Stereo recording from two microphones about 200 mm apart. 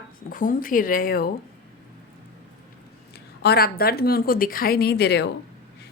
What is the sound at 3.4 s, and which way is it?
A woman's voice, 50° left (ahead or behind).